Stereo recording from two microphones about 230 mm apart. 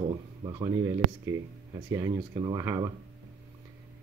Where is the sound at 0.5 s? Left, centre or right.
Centre.